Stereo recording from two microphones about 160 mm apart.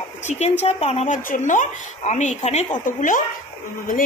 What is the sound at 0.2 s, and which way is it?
A woman's voice, 45° left (ahead or behind).